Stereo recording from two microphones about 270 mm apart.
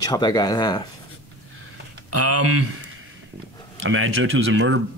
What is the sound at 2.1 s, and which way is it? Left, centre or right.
Speech, right.